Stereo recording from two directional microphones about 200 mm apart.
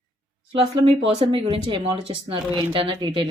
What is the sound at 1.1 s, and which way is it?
Speech, 30° right (ahead or behind).